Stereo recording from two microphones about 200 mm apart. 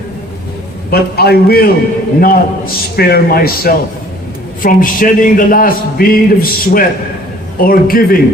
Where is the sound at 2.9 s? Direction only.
50° left (ahead or behind).